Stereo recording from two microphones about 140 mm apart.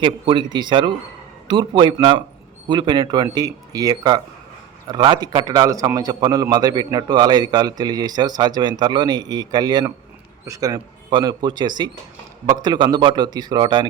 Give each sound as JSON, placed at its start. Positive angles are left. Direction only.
{"t": 0.0, "sound": "a man's voice", "side_deg": -35}